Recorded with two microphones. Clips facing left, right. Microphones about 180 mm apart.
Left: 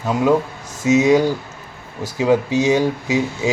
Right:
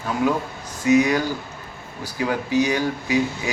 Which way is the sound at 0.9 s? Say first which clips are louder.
Left 4 dB; 25° left (ahead or behind).